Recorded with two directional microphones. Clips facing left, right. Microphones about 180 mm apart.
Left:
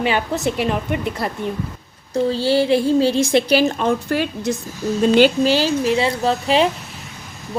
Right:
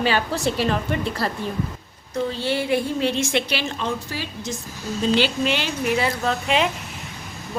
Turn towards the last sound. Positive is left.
turn(degrees=30)  # may be behind; listen again after turning